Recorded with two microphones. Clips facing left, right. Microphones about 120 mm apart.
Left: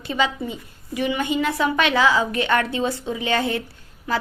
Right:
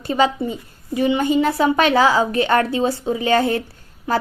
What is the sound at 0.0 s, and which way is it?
A woman's voice, 40° right (ahead or behind).